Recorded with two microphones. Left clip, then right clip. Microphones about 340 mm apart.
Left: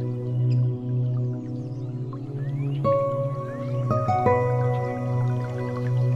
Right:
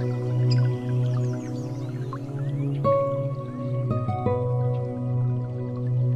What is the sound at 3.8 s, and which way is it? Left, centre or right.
Music, centre.